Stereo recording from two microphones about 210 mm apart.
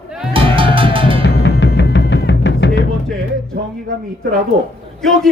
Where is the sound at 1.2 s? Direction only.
50° left (ahead or behind).